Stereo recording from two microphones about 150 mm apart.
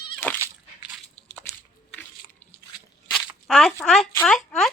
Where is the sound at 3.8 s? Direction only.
5° left (ahead or behind).